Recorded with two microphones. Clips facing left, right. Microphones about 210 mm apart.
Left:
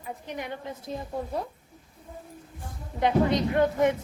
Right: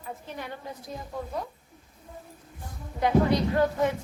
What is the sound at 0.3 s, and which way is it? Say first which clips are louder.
Speech: left 4 dB; 15° left (ahead or behind).